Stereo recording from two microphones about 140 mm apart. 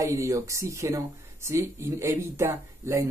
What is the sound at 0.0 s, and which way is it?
Speech, 20° right (ahead or behind).